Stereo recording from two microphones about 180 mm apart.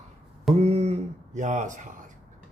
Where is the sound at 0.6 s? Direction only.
35° right (ahead or behind).